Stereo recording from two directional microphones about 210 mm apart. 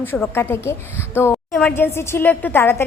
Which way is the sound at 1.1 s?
10° left (ahead or behind).